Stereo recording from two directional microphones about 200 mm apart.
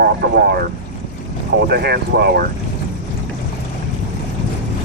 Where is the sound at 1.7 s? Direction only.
55° right (ahead or behind).